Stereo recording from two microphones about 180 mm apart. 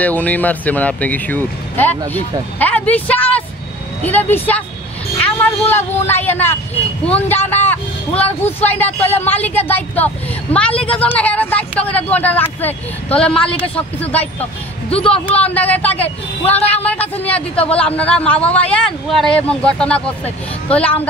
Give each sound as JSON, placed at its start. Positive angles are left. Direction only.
{"t": 0.0, "sound": "a woman's voice", "side_deg": 10}
{"t": 14.4, "sound": "speech", "side_deg": 30}
{"t": 15.4, "sound": "a woman's voice", "side_deg": 10}
{"t": 16.0, "sound": "speech", "side_deg": 35}
{"t": 16.6, "sound": "a woman's voice", "side_deg": 10}